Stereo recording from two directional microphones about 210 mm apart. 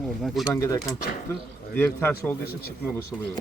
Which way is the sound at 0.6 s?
15° left (ahead or behind).